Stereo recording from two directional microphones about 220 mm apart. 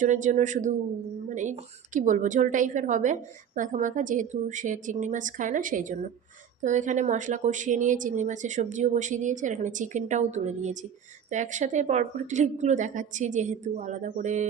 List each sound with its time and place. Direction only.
0.0 s a woman's voice: 35° right (ahead or behind)